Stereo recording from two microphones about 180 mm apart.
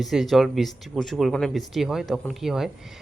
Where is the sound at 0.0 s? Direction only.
Centre (ahead or behind).